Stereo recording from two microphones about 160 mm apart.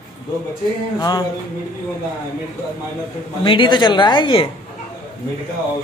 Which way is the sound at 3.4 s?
30° left (ahead or behind).